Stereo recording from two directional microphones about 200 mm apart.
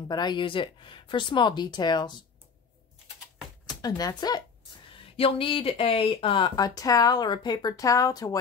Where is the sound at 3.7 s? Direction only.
20° left (ahead or behind).